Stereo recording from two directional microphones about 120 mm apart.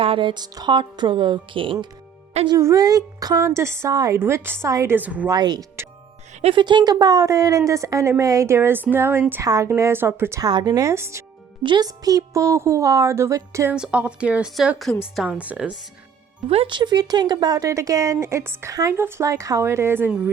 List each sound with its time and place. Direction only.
0.0 s speech: 45° right (ahead or behind)
2.6 s speech: 25° right (ahead or behind)
4.9 s speech: 10° right (ahead or behind)
5.3 s speech: 35° right (ahead or behind)
10.5 s speech: 35° right (ahead or behind)
11.6 s speech: 40° right (ahead or behind)
13.7 s a woman's voice: 10° right (ahead or behind)
16.5 s speech: 50° right (ahead or behind); by 20.1 s 20° right (ahead or behind)